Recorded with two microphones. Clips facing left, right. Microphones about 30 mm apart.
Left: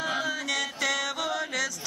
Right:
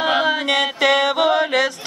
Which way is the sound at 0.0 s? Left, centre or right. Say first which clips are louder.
Right 11 dB; right.